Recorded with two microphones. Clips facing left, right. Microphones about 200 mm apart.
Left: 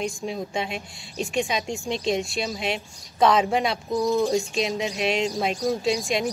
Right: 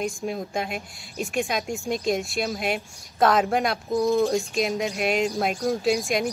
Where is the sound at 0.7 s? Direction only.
Centre (ahead or behind).